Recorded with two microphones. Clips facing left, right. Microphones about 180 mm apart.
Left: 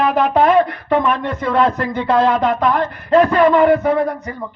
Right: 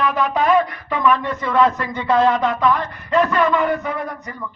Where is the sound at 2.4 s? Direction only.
50° left (ahead or behind).